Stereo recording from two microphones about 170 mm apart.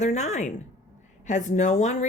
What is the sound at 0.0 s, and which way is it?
A woman's voice, 40° left (ahead or behind).